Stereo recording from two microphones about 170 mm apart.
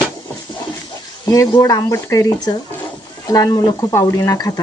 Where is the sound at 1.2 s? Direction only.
25° left (ahead or behind).